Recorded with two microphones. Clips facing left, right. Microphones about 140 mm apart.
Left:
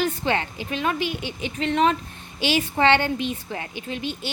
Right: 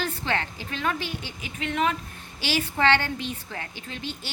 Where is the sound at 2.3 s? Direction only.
20° left (ahead or behind).